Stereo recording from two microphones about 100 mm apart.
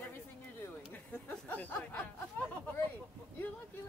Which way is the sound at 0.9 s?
15° left (ahead or behind).